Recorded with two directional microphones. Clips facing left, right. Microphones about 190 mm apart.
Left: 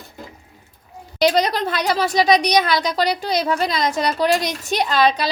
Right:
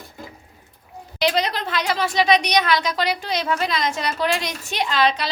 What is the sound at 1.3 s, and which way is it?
Speech, 40° left (ahead or behind).